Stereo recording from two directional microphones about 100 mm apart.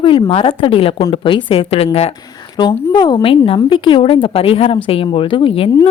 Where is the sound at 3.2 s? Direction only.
65° left (ahead or behind).